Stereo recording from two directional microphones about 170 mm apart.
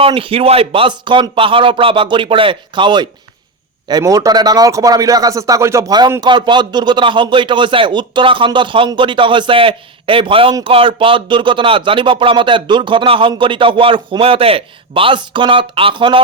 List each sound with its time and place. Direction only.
0.0 s a man's voice: 30° right (ahead or behind)